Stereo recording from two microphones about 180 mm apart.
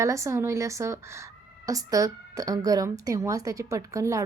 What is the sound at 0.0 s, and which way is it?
A woman's voice, 15° right (ahead or behind).